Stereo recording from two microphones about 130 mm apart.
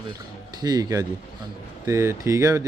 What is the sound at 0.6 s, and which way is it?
Speech, 30° right (ahead or behind).